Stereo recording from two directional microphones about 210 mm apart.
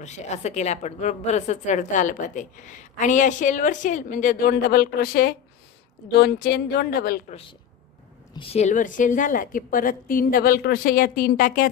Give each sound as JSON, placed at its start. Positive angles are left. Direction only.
{"t": 0.0, "sound": "a woman's voice", "side_deg": 35}
{"t": 8.4, "sound": "a woman's voice", "side_deg": 30}